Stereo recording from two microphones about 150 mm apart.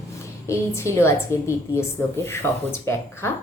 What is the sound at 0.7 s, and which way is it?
A woman's voice, 20° left (ahead or behind).